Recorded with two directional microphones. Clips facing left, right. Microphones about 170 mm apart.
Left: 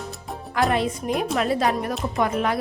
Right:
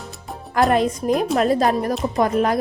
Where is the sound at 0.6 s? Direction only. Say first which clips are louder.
Right 4 dB; 45° right (ahead or behind).